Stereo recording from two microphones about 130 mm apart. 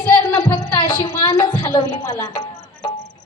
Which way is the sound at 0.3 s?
35° left (ahead or behind).